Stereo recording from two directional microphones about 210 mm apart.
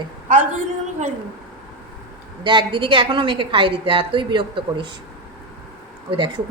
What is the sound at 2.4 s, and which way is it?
A woman's voice, 25° right (ahead or behind).